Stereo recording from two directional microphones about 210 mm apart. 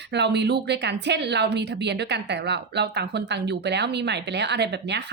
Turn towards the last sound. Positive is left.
turn(degrees=-55)  # may be behind; listen again after turning